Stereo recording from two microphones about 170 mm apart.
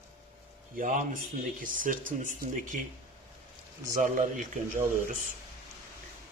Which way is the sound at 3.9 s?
50° right (ahead or behind).